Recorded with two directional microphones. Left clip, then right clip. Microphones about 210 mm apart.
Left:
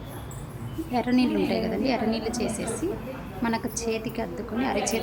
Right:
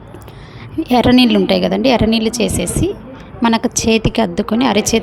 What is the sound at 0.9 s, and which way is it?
A woman's voice, 45° right (ahead or behind).